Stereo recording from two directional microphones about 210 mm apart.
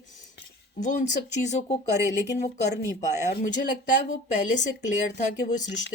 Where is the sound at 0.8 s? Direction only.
35° left (ahead or behind).